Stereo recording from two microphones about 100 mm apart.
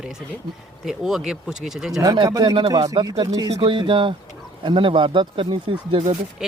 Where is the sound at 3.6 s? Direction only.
55° right (ahead or behind).